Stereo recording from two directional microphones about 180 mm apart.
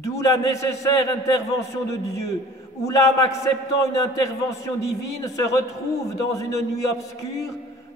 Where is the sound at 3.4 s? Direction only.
20° left (ahead or behind).